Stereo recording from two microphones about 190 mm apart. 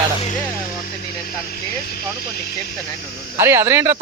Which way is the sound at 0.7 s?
50° left (ahead or behind).